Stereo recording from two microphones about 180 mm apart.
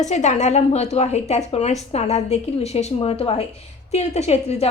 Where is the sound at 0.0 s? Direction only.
40° left (ahead or behind).